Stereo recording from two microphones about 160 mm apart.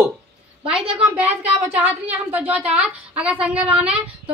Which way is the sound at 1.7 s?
10° right (ahead or behind).